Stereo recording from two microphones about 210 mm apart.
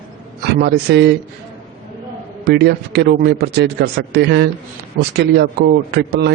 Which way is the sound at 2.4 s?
50° right (ahead or behind).